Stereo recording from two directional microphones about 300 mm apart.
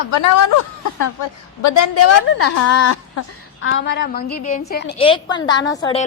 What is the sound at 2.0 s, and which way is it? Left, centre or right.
A woman's voice, left.